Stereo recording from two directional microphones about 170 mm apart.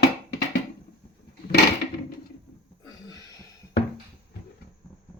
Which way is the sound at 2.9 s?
20° left (ahead or behind).